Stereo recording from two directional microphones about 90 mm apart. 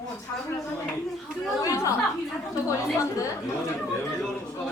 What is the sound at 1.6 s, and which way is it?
Speech, 40° left (ahead or behind).